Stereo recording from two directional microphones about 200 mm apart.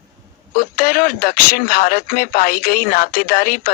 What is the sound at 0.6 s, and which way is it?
Speech, 45° left (ahead or behind).